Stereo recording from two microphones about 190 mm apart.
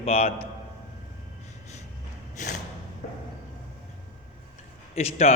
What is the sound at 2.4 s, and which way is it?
Speech, 40° left (ahead or behind).